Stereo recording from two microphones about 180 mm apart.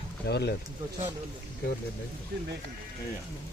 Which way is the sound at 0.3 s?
65° left (ahead or behind).